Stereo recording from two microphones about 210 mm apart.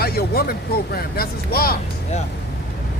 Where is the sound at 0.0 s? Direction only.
45° left (ahead or behind).